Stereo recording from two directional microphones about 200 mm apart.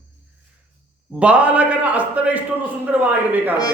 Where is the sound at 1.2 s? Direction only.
5° right (ahead or behind).